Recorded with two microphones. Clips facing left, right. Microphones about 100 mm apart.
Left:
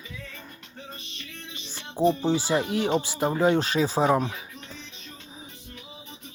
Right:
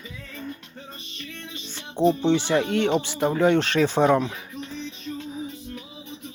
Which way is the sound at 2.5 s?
20° left (ahead or behind).